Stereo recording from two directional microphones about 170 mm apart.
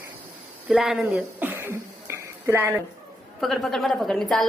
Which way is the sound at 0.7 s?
5° right (ahead or behind).